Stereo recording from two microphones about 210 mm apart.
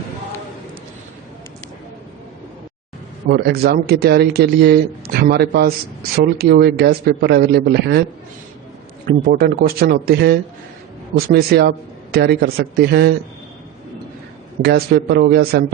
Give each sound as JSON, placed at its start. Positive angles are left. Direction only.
{"t": 3.2, "sound": "a man's voice", "side_deg": -50}
{"t": 9.0, "sound": "a man's voice", "side_deg": -45}
{"t": 14.6, "sound": "a man's voice", "side_deg": -50}